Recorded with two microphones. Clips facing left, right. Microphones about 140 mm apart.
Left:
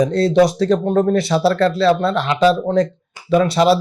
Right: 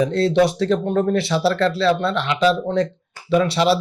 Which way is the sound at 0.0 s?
40° left (ahead or behind).